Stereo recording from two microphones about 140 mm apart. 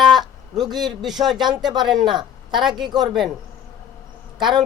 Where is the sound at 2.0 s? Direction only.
35° right (ahead or behind).